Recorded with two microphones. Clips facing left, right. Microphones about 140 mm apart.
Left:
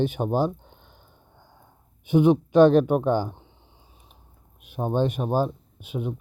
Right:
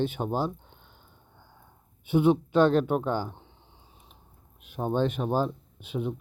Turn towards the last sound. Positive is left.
turn(degrees=10)  # may be behind; listen again after turning